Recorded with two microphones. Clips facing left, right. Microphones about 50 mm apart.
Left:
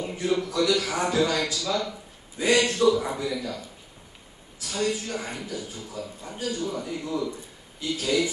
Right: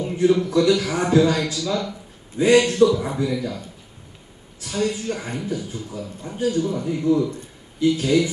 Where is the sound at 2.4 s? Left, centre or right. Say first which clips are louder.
Right 6 dB; right.